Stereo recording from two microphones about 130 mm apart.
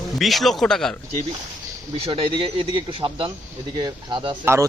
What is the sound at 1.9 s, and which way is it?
Speech, 50° right (ahead or behind).